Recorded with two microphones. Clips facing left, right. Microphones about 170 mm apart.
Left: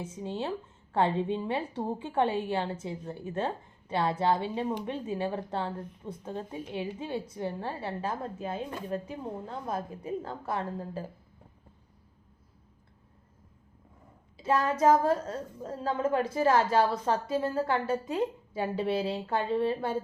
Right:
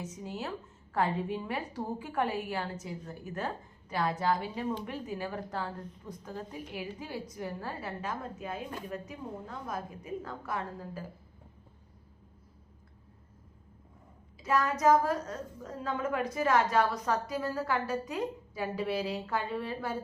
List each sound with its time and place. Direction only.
0.0 s a woman's voice: 30° left (ahead or behind)
14.3 s a woman's voice: 30° left (ahead or behind)